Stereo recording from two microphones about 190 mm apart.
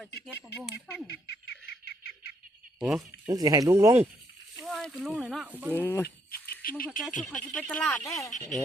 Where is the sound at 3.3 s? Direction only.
20° right (ahead or behind).